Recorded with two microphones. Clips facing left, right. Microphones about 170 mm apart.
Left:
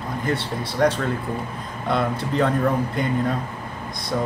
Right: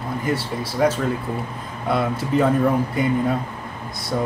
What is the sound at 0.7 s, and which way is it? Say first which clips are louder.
Speech: right 1 dB; 5° right (ahead or behind).